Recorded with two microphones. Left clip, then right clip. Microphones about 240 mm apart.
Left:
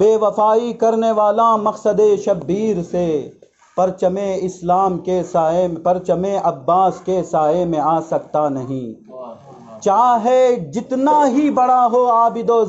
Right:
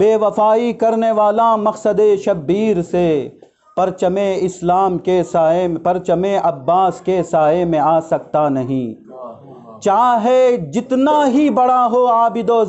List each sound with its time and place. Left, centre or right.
0.0 s a man's voice: right
9.8 s a man's voice: right